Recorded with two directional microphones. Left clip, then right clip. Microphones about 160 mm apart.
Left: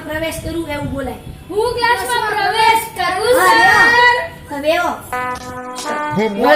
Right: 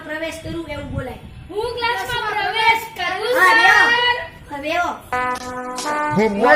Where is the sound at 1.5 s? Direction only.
Centre (ahead or behind).